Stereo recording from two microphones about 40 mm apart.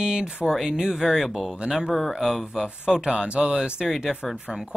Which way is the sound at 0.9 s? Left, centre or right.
Centre.